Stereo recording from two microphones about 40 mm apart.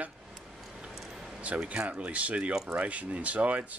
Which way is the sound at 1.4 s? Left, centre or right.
Right.